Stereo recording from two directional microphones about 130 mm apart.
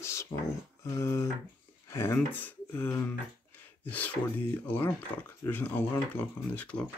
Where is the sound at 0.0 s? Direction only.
20° left (ahead or behind).